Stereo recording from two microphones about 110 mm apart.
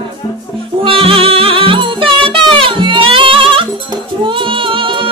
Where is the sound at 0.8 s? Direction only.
55° right (ahead or behind).